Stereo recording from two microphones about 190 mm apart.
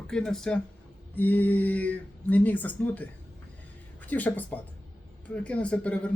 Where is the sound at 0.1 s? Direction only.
5° left (ahead or behind).